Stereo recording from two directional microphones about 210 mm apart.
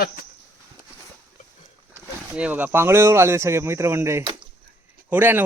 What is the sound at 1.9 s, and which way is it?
Speech, 5° right (ahead or behind).